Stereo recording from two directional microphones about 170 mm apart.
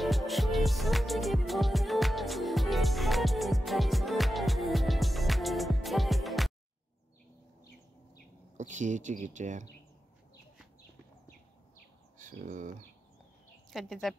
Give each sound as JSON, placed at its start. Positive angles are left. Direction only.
{"t": 0.0, "sound": "music", "side_deg": 0}
{"t": 8.5, "sound": "speech", "side_deg": -45}
{"t": 12.4, "sound": "speech", "side_deg": -50}
{"t": 13.7, "sound": "speech", "side_deg": 0}